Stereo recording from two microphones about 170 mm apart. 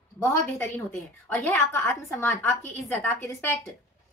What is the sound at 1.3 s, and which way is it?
A woman's voice, 15° left (ahead or behind).